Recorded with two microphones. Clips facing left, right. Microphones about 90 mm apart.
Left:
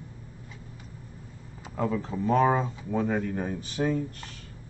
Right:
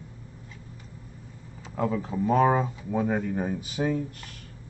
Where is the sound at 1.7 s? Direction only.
5° right (ahead or behind).